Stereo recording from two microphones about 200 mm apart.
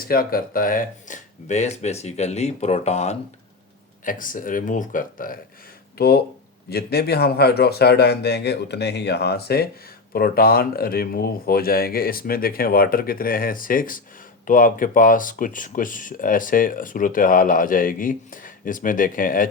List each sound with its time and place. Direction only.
0.0 s speech: 45° left (ahead or behind)